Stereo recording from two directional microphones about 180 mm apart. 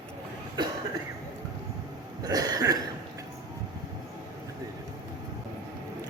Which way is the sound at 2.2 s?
20° right (ahead or behind).